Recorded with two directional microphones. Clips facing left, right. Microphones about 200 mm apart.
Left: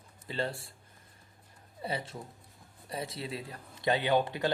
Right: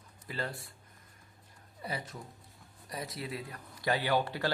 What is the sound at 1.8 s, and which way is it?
Speech, 25° left (ahead or behind).